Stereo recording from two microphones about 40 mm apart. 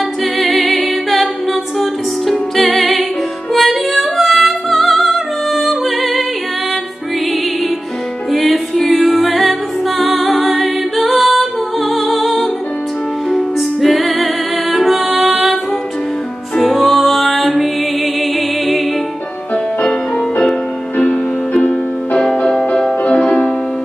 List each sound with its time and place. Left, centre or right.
0.2 s a capella: centre
1.5 s music: centre
8.3 s music: centre
21.1 s music: left